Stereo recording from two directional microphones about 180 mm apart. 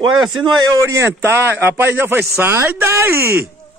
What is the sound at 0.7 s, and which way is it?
A man's voice, 15° right (ahead or behind).